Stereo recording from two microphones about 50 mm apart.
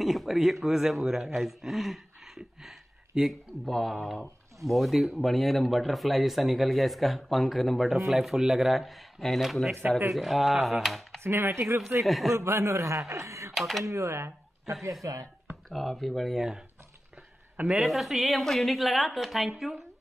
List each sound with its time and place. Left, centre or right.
0.0 s speech: centre
9.8 s speech: right
10.1 s speech: centre
11.2 s speech: right
12.0 s speech: centre
12.4 s speech: right
13.6 s speech: centre
13.8 s speech: right
15.7 s speech: centre
17.7 s speech: centre